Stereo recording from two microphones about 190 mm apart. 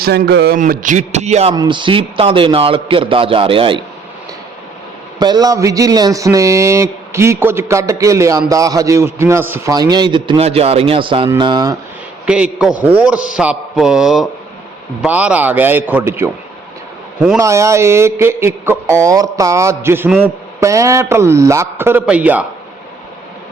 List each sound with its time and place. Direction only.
0.0 s speech: 55° right (ahead or behind)
0.6 s a man's voice: 40° right (ahead or behind)
1.5 s a man's voice: 25° right (ahead or behind)
5.2 s a man's voice: 20° right (ahead or behind)
12.2 s a man's voice: 5° right (ahead or behind)
17.3 s a man's voice: 15° right (ahead or behind)